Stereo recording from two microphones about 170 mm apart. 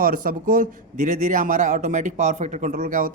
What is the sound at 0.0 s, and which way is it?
A man's voice, 55° right (ahead or behind).